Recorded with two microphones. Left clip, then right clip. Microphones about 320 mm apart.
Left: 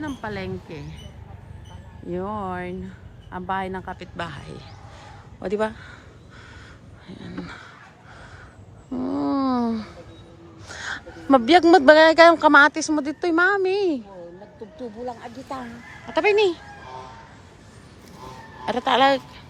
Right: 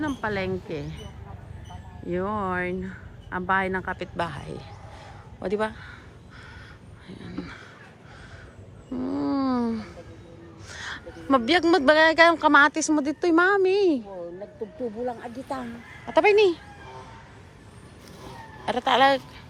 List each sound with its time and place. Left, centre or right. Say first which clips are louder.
0.0 s speech: right 3 dB; centre
7.1 s speech: left 2 dB; centre
9.0 s speech: left 3 dB; centre
9.2 s a sound: left 3 dB; centre
11.3 s speech: left 6 dB; centre
15.0 s speech: right 1 dB; right
16.1 s speech: right 1 dB; centre
18.6 s speech: left 1 dB; centre